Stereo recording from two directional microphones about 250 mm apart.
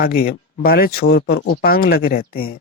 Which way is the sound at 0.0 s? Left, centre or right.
Left.